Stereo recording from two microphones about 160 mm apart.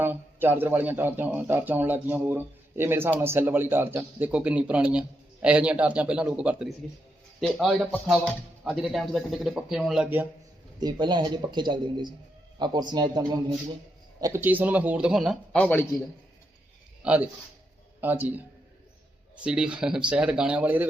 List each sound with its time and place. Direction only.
0.0 s speech: 15° right (ahead or behind)
10.8 s a man's voice: 25° right (ahead or behind); by 15.9 s 10° left (ahead or behind)
17.0 s speech: 10° right (ahead or behind)
19.4 s speech: 5° right (ahead or behind)